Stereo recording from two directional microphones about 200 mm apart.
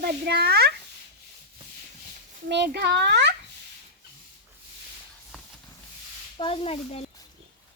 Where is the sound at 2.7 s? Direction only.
55° right (ahead or behind).